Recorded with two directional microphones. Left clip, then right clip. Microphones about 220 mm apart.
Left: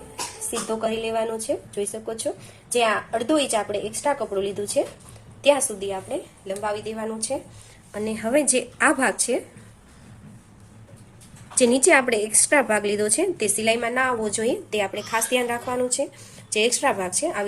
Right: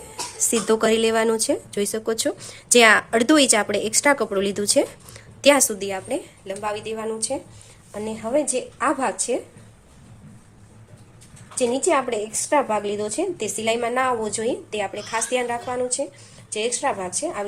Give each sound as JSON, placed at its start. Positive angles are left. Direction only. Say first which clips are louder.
{"t": 0.7, "sound": "speech", "louder": "right 6 dB", "side_deg": -40}
{"t": 6.6, "sound": "a woman's voice", "louder": "right 1 dB", "side_deg": -15}
{"t": 11.5, "sound": "a woman's voice", "louder": "left 3 dB", "side_deg": 10}